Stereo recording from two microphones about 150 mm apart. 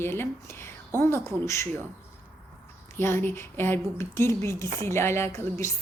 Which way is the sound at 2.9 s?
15° left (ahead or behind).